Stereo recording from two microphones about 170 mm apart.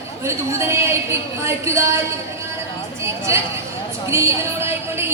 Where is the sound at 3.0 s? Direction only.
15° right (ahead or behind).